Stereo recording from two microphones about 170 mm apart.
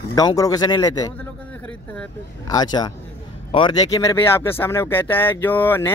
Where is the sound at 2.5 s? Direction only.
25° left (ahead or behind).